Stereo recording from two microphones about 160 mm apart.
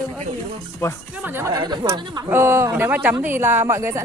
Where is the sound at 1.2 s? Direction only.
15° right (ahead or behind).